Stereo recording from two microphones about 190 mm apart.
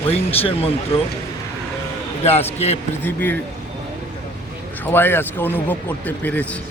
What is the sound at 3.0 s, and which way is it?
Speech, 10° left (ahead or behind).